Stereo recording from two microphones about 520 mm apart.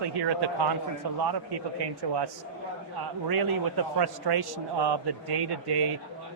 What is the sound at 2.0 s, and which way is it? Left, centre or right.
Speech, right.